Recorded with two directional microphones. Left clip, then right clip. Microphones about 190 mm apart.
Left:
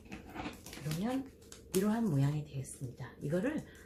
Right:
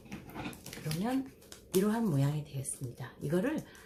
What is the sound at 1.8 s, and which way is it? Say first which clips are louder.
Speech: right 2 dB; 25° right (ahead or behind).